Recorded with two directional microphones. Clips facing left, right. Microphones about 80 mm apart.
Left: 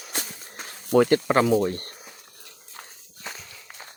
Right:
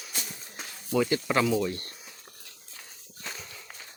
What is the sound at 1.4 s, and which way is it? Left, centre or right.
Speech, left.